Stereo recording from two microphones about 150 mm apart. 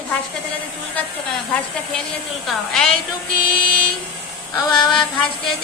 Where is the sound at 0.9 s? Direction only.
10° left (ahead or behind).